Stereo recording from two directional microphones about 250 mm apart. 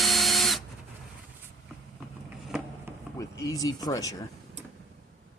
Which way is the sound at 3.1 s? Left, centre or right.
Centre.